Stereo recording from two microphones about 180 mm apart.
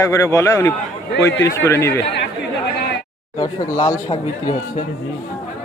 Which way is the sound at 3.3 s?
20° left (ahead or behind).